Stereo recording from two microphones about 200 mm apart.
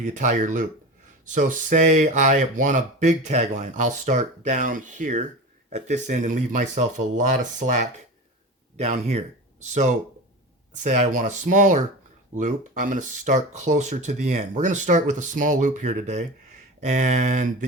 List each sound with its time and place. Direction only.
0.0 s speech: 40° right (ahead or behind)